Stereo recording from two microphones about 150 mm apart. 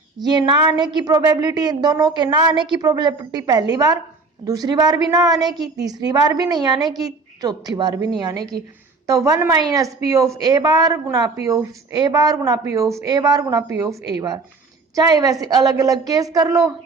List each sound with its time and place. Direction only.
0.2 s a woman's voice: 30° right (ahead or behind)